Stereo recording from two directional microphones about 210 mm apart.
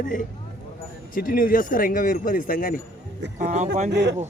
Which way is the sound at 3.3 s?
35° right (ahead or behind).